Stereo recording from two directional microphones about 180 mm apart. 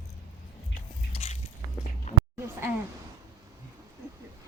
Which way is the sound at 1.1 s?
35° left (ahead or behind).